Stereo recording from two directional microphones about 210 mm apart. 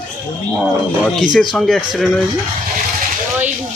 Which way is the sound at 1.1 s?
Centre (ahead or behind).